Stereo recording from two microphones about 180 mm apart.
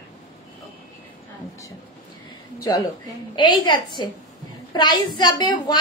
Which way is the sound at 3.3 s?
25° left (ahead or behind).